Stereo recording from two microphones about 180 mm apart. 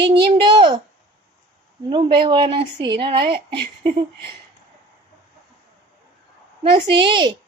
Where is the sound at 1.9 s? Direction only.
25° right (ahead or behind).